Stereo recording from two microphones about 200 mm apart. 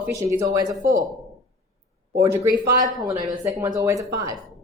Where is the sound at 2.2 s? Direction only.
15° right (ahead or behind).